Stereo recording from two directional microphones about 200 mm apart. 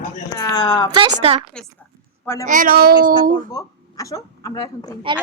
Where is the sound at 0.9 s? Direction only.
25° right (ahead or behind).